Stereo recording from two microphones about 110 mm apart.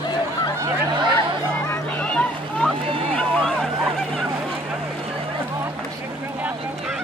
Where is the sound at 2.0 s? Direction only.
10° left (ahead or behind).